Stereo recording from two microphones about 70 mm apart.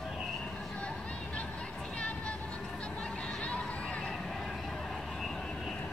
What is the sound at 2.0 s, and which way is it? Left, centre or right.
Vehicle, centre.